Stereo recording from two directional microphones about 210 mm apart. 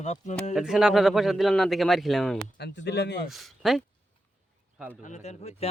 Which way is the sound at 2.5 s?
55° left (ahead or behind).